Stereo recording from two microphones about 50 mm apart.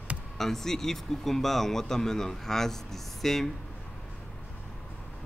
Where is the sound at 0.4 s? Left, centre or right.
Centre.